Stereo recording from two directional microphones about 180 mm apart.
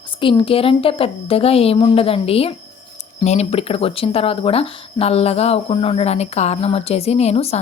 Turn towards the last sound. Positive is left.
turn(degrees=35)  # may be behind; listen again after turning